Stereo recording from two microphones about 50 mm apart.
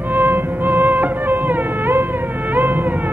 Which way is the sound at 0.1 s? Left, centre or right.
Right.